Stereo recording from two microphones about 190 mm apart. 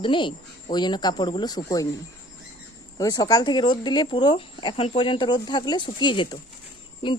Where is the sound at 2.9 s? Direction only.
20° left (ahead or behind).